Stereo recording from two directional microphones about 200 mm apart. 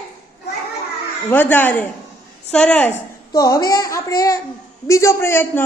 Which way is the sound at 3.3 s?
20° left (ahead or behind).